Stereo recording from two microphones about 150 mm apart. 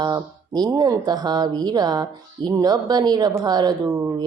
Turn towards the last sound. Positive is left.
turn(degrees=-20)  # may be behind; listen again after turning